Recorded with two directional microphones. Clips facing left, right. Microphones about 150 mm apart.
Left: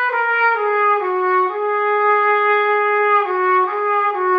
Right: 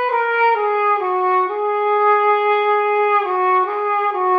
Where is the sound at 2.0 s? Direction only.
25° right (ahead or behind).